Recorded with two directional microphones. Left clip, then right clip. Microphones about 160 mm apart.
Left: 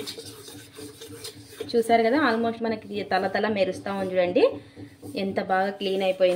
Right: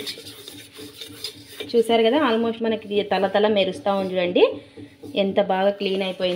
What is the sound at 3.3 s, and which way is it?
Speech, 20° right (ahead or behind).